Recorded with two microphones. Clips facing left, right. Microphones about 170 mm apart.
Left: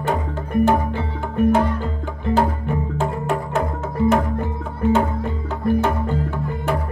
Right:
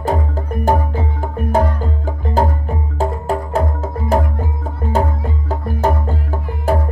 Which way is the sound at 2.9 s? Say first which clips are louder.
Right 6 dB; 35° right (ahead or behind).